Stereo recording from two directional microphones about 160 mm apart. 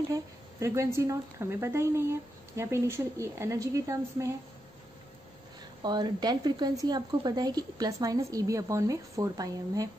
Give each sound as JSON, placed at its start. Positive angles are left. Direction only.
{"t": 0.1, "sound": "speech", "side_deg": -20}
{"t": 5.8, "sound": "a woman's voice", "side_deg": -25}